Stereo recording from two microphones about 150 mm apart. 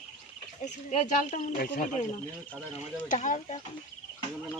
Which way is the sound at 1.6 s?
65° left (ahead or behind).